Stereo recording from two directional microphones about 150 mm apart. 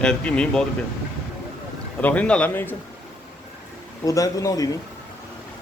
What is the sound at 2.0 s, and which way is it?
Speech, 10° left (ahead or behind).